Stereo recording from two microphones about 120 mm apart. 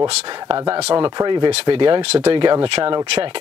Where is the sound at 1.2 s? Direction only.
40° right (ahead or behind).